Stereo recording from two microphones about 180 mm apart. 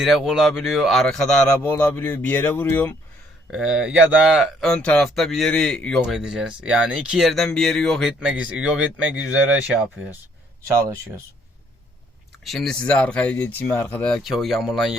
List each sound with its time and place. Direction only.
0.0 s speech: centre (ahead or behind)
3.5 s speech: 5° right (ahead or behind)
12.5 s speech: centre (ahead or behind)